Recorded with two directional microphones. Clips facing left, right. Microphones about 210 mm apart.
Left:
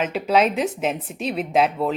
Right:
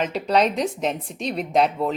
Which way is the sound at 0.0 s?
Centre (ahead or behind).